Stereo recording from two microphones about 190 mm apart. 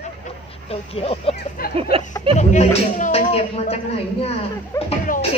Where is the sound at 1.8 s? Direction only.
30° right (ahead or behind).